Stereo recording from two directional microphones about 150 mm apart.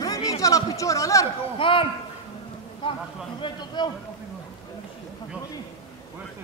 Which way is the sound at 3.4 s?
30° left (ahead or behind).